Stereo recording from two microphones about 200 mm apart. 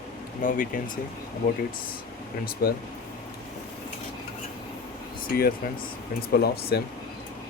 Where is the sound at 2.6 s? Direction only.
50° left (ahead or behind).